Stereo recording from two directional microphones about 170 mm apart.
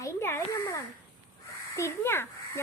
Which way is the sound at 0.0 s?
15° left (ahead or behind).